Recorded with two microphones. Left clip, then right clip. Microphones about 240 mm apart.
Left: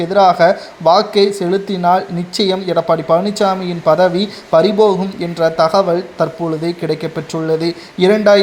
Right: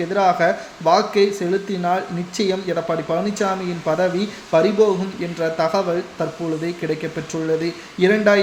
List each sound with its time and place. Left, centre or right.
0.1 s speech: left